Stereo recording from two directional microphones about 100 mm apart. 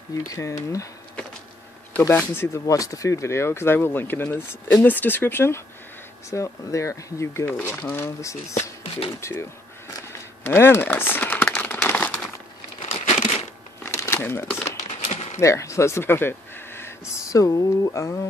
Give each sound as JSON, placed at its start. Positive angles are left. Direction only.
{"t": 0.1, "sound": "speech", "side_deg": 35}
{"t": 2.0, "sound": "speech", "side_deg": 20}
{"t": 7.4, "sound": "speech", "side_deg": 20}
{"t": 11.4, "sound": "crumpling", "side_deg": 10}
{"t": 13.8, "sound": "crumpling", "side_deg": 25}
{"t": 15.0, "sound": "a sound", "side_deg": 90}
{"t": 15.4, "sound": "speech", "side_deg": 30}
{"t": 17.1, "sound": "speech", "side_deg": 35}